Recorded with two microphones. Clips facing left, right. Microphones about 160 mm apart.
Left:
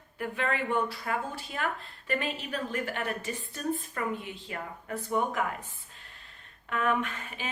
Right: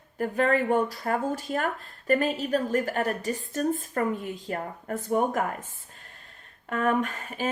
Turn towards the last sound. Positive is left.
turn(degrees=-40)  # may be behind; listen again after turning